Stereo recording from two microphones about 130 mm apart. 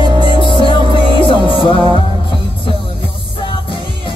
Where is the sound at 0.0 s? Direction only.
35° right (ahead or behind).